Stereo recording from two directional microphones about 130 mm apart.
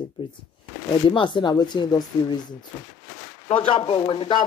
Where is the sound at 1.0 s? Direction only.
40° left (ahead or behind).